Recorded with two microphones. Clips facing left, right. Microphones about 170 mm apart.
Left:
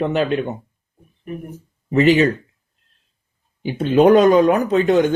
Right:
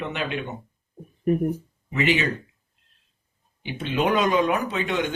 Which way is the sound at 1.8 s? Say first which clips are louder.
Left 10 dB; 40° left (ahead or behind).